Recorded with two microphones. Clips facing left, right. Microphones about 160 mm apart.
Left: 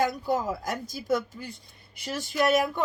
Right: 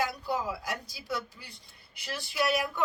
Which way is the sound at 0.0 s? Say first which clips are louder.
Left 5 dB; 45° left (ahead or behind).